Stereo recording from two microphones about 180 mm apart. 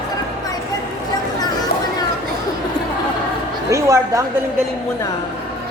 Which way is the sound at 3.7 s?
15° right (ahead or behind).